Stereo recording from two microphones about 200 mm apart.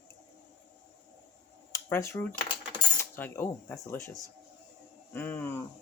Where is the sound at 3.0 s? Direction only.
10° left (ahead or behind).